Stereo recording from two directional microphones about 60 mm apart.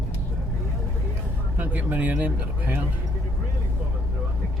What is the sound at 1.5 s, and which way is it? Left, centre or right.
Speech, right.